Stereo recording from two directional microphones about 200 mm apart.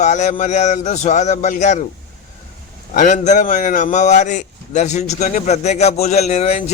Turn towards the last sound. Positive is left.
turn(degrees=35)  # may be behind; listen again after turning